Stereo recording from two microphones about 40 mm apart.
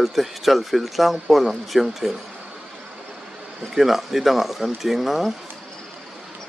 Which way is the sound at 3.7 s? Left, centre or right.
Centre.